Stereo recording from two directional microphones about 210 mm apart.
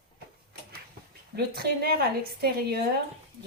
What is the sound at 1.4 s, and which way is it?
A woman's voice, 50° right (ahead or behind).